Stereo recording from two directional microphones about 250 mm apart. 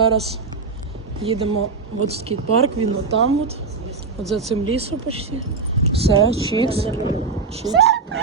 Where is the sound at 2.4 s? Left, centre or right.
Right.